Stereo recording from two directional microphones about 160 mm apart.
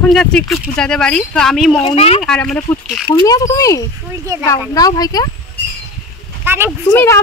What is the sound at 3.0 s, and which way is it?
Speech, 25° left (ahead or behind).